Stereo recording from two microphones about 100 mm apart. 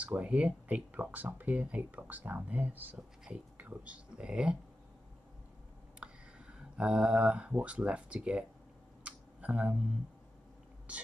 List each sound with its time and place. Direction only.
0.0 s speech: 15° right (ahead or behind)
5.9 s speech: 10° right (ahead or behind)
9.0 s tick: 15° right (ahead or behind)
10.9 s speech: 10° right (ahead or behind)